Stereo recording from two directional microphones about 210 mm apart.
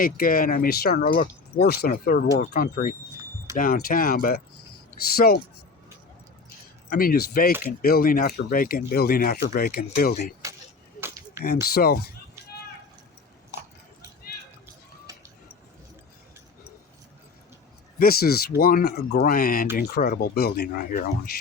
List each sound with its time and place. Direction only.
0.0 s speech: 45° left (ahead or behind)
6.9 s speech: 45° left (ahead or behind)
11.6 s speech: 45° left (ahead or behind)
12.4 s a sound: 15° right (ahead or behind)
15.1 s vehicle: 15° right (ahead or behind)
18.0 s speech: 45° left (ahead or behind)